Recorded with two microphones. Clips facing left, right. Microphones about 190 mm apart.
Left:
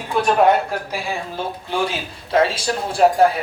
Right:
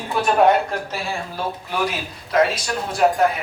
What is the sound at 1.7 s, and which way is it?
A man's voice, 30° left (ahead or behind).